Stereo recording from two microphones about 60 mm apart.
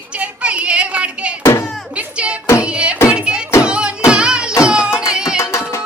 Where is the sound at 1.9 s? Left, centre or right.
Centre.